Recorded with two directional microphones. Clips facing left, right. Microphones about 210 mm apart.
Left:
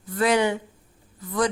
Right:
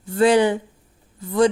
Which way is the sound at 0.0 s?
30° right (ahead or behind).